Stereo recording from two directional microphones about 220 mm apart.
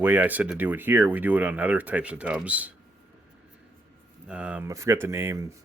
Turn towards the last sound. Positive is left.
turn(degrees=-10)  # may be behind; listen again after turning